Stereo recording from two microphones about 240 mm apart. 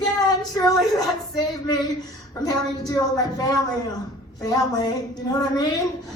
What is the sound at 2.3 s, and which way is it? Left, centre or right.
A woman's voice, centre.